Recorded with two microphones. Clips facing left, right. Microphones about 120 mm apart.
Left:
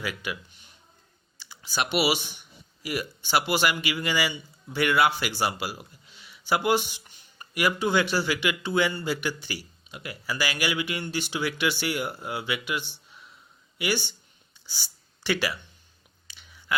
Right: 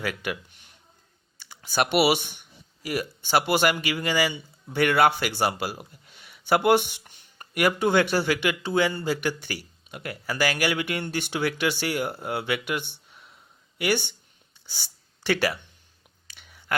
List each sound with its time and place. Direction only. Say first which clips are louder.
0.0 s speech: right 3 dB; 55° right (ahead or behind)
1.4 s speech: right 5 dB; 50° right (ahead or behind)
16.2 s a sound: even; 55° right (ahead or behind)